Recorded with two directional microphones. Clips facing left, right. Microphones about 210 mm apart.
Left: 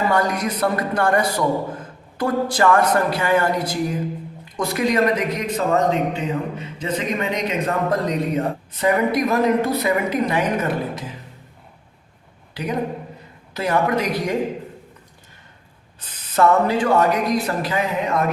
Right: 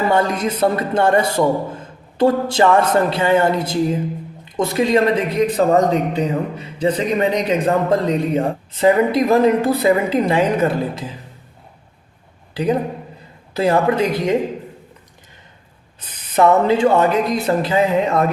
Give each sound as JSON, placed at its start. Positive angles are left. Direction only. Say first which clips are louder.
{"t": 0.1, "sound": "a man's voice", "louder": "right 3 dB", "side_deg": -25}
{"t": 13.5, "sound": "a man's voice", "louder": "right 4 dB", "side_deg": -30}
{"t": 16.0, "sound": "a man's voice", "louder": "right 3 dB", "side_deg": -20}